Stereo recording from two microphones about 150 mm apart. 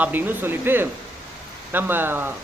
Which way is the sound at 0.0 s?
15° right (ahead or behind).